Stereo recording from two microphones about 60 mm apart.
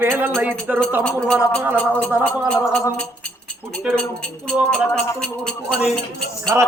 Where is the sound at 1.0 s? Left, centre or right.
Centre.